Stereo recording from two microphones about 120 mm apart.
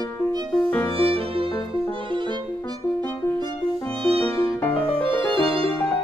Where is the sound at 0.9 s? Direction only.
50° right (ahead or behind).